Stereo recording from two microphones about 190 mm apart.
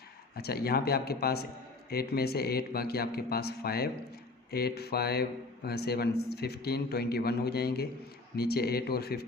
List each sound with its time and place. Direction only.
0.3 s a man's voice: 55° left (ahead or behind)